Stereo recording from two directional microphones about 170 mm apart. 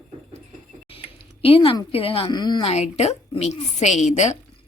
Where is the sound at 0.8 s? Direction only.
35° left (ahead or behind).